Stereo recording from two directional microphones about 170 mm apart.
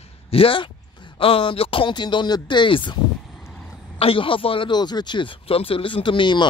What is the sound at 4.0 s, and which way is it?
Speech, 30° left (ahead or behind).